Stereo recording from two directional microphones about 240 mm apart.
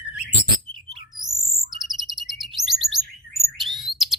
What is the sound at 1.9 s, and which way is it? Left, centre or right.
Chirp, centre.